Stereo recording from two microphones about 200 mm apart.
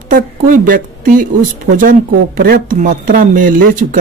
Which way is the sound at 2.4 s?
45° right (ahead or behind).